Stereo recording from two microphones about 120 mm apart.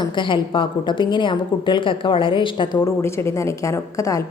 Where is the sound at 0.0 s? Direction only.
45° left (ahead or behind).